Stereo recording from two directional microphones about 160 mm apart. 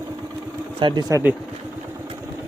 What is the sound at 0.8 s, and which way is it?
Speech, 25° right (ahead or behind).